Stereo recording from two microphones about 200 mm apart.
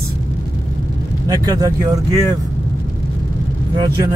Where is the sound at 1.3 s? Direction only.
15° right (ahead or behind).